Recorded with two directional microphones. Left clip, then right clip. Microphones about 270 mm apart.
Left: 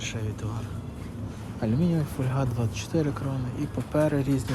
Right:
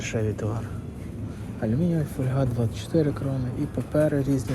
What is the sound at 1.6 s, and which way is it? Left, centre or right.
Speech, left.